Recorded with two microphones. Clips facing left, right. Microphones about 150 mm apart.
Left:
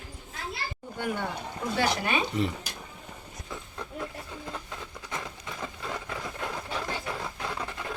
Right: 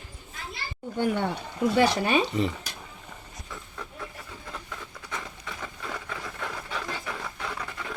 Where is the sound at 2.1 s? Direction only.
Centre (ahead or behind).